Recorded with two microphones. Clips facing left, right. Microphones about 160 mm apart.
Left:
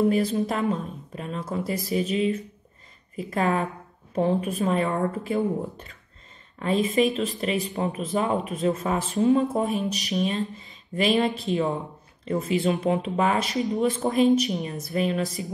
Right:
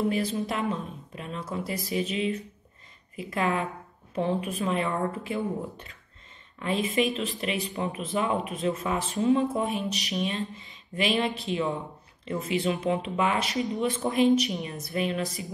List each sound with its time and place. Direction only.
0.1 s speech: 45° left (ahead or behind)